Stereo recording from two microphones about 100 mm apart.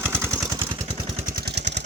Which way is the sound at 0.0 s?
20° right (ahead or behind).